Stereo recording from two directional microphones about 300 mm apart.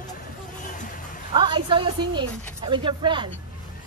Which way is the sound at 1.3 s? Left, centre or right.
Centre.